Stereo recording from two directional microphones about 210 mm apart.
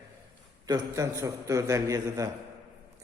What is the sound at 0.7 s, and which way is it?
A man's voice, 15° right (ahead or behind).